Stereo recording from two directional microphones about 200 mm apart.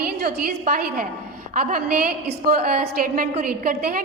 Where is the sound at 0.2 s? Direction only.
50° right (ahead or behind).